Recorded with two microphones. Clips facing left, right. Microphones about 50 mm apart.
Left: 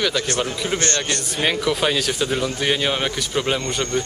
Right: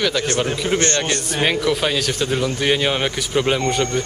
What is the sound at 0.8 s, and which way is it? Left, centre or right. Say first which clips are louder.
Speech: right 3 dB; right.